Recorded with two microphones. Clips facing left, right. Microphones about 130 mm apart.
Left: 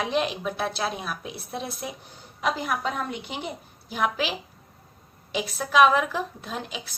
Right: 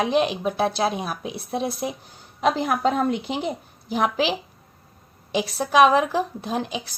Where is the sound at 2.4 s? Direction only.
50° right (ahead or behind).